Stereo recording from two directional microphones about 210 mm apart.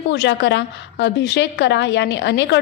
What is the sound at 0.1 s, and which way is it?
A woman's voice, 55° left (ahead or behind).